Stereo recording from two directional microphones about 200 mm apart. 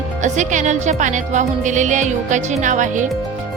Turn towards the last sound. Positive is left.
turn(degrees=-40)  # may be behind; listen again after turning